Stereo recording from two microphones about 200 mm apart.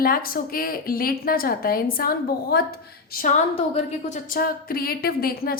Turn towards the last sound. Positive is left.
turn(degrees=45)  # may be behind; listen again after turning